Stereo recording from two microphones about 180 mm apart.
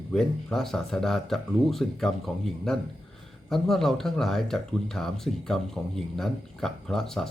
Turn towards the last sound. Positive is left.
turn(degrees=0)  # may be behind; listen again after turning